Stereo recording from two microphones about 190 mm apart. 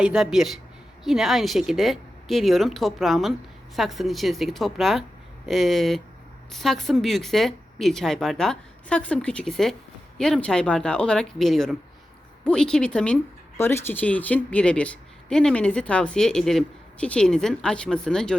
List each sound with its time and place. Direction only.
0.0 s speech: 5° right (ahead or behind)